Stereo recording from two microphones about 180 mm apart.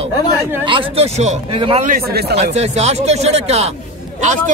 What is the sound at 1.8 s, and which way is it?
Speech, 60° right (ahead or behind).